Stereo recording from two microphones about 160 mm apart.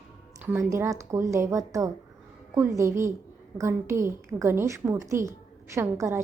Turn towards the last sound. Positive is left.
turn(degrees=-15)  # may be behind; listen again after turning